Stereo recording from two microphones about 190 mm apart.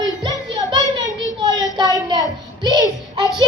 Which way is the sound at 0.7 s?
25° right (ahead or behind).